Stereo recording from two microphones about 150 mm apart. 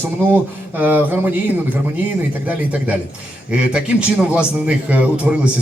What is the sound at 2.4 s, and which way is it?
A man's voice, 10° right (ahead or behind).